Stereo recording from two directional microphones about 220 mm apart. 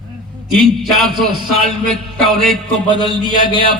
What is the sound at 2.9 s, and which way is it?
Speech, 20° right (ahead or behind).